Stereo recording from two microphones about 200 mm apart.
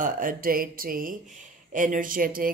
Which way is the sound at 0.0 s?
45° right (ahead or behind).